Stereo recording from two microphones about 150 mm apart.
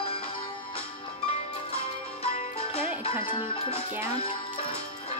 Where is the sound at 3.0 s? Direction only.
35° left (ahead or behind).